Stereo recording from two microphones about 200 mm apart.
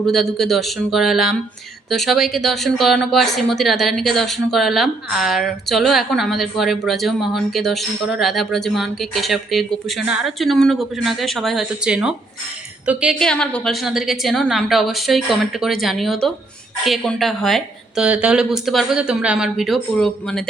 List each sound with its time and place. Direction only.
0.0 s speech: centre (ahead or behind)